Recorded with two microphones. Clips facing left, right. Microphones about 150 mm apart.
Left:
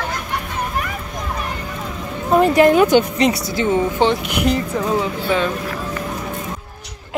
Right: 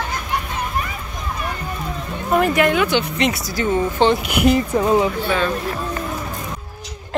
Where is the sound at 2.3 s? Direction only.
30° left (ahead or behind).